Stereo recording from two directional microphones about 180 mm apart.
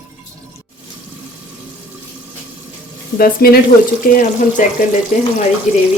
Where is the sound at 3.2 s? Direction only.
55° left (ahead or behind).